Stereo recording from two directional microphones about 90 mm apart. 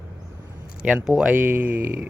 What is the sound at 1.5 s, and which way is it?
Speech, 25° right (ahead or behind).